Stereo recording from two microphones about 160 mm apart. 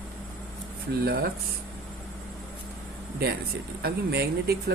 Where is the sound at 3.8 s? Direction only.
80° right.